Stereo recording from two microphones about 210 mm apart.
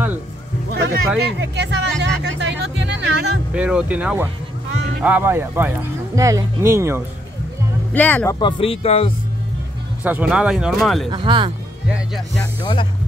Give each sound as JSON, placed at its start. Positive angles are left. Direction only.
{"t": 0.7, "sound": "speech", "side_deg": -50}
{"t": 3.5, "sound": "speech", "side_deg": -5}
{"t": 7.9, "sound": "speech", "side_deg": 10}
{"t": 8.4, "sound": "speech", "side_deg": 25}
{"t": 10.0, "sound": "speech", "side_deg": -5}
{"t": 11.1, "sound": "speech", "side_deg": -20}